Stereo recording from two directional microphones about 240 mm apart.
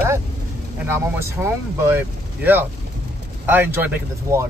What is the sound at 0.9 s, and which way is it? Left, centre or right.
Speech, centre.